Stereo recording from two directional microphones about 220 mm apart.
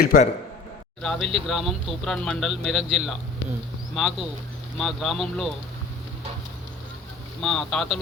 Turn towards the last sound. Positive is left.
turn(degrees=0)  # may be behind; listen again after turning